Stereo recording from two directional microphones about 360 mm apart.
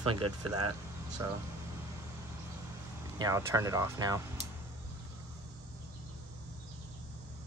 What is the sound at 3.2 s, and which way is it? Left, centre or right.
Speech, centre.